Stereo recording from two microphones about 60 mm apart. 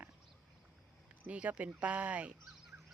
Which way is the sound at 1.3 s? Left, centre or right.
Right.